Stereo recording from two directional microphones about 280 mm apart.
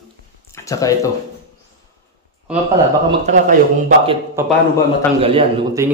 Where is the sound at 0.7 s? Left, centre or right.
Centre.